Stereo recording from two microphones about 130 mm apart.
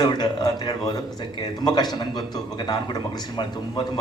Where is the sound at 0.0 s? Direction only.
35° left (ahead or behind).